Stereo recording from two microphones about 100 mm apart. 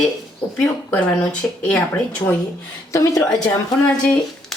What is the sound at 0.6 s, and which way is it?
Speech, 10° left (ahead or behind).